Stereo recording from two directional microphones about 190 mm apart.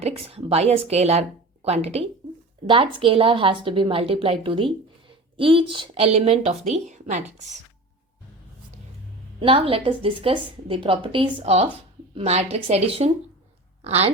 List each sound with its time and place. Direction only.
0.0 s a woman's voice: 30° right (ahead or behind)
9.4 s a woman's voice: 30° right (ahead or behind)